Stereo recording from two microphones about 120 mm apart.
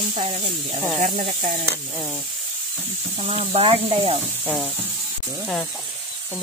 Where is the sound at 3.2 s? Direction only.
50° right (ahead or behind).